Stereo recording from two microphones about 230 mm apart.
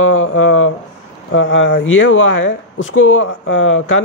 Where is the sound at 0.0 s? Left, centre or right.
Left.